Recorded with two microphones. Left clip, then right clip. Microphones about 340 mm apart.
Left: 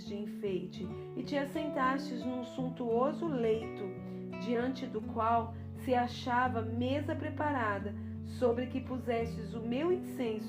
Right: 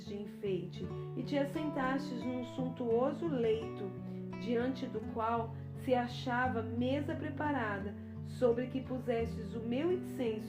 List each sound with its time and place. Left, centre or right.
1.3 s a woman's voice: centre